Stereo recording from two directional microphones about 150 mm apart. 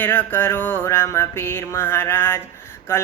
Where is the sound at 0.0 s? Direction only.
10° left (ahead or behind).